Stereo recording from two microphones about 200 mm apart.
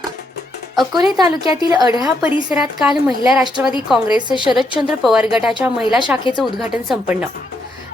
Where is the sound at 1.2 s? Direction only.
15° right (ahead or behind).